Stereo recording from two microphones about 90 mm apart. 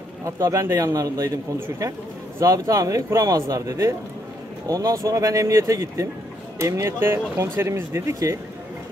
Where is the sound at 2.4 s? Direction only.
35° right (ahead or behind).